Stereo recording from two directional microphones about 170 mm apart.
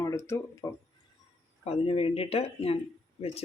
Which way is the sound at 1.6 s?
35° left (ahead or behind).